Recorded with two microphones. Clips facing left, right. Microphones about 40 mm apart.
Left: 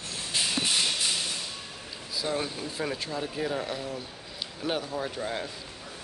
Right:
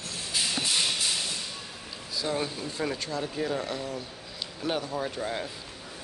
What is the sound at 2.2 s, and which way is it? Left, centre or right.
Speech, centre.